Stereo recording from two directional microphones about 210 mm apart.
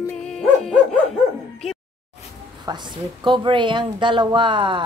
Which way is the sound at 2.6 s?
20° right (ahead or behind).